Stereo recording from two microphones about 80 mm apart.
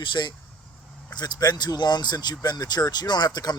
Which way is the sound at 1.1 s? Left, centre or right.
Left.